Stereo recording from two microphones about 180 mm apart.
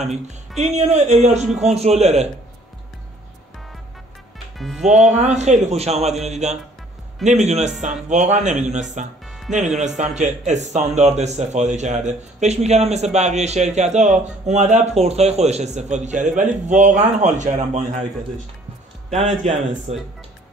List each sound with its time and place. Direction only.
0.0 s speech: 40° right (ahead or behind)
4.6 s speech: centre (ahead or behind)
5.1 s speech: 40° right (ahead or behind)
9.2 s music: centre (ahead or behind)
9.5 s speech: 40° right (ahead or behind)
19.1 s speech: 40° right (ahead or behind)